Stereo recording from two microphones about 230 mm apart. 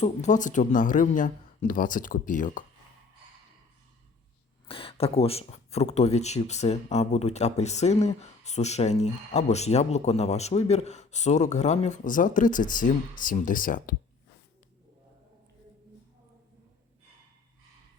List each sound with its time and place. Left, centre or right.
0.0 s speech: left
4.7 s speech: left